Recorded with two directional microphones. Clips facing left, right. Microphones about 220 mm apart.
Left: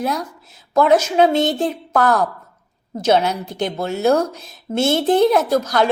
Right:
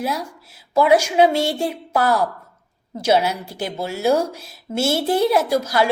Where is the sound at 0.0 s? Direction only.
10° right (ahead or behind).